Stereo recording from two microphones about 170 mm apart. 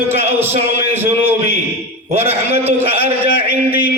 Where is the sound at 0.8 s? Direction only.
10° right (ahead or behind).